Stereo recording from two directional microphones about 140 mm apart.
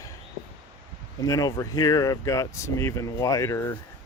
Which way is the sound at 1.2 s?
25° left (ahead or behind).